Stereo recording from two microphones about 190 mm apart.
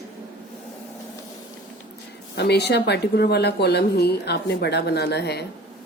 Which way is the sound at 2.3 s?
60° left (ahead or behind).